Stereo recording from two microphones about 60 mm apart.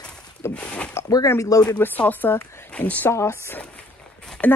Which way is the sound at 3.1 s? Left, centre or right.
Left.